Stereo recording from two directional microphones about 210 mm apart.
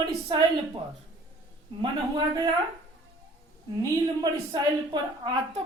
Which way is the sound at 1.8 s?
20° right (ahead or behind).